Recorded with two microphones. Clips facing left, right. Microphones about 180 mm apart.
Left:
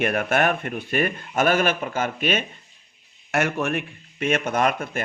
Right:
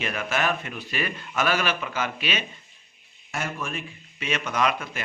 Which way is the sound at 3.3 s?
70° left (ahead or behind).